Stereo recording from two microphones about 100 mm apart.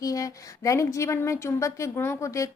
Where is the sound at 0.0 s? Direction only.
35° left (ahead or behind).